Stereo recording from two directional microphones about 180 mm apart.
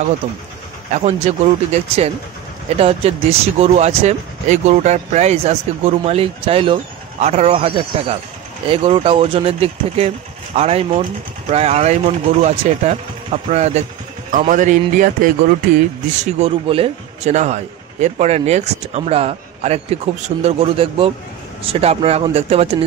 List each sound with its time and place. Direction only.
0.9 s speech: 35° right (ahead or behind)
16.3 s speech: 35° right (ahead or behind)